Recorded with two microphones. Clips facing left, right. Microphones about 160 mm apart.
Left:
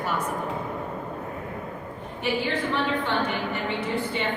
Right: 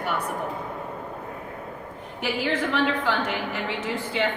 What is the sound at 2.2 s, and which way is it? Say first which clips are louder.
A woman's voice: right 1 dB; 90° right.